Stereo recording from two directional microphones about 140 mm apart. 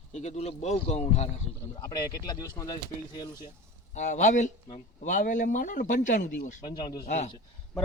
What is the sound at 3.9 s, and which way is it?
Speech, 60° left (ahead or behind).